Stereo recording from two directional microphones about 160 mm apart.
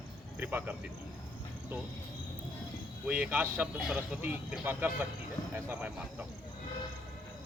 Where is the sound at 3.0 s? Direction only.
10° right (ahead or behind).